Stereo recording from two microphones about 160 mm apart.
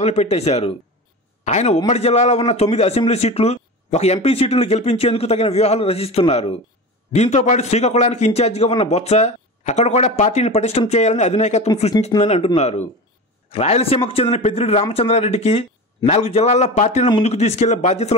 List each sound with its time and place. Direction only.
0.0 s a man's voice: 45° left (ahead or behind)